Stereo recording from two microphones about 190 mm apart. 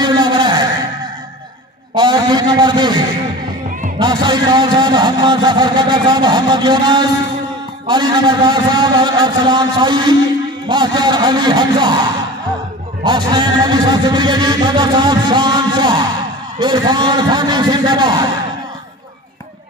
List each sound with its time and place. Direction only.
0.0 s a sound: 25° right (ahead or behind)
2.0 s a man's voice: 25° right (ahead or behind)
4.0 s a man's voice: 25° right (ahead or behind)
13.0 s a man's voice: 25° right (ahead or behind)